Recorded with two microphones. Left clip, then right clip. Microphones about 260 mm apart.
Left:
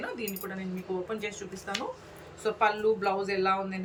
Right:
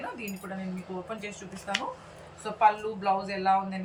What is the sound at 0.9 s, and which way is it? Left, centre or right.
Speech, centre.